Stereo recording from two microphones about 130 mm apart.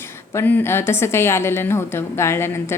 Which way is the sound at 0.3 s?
15° left (ahead or behind).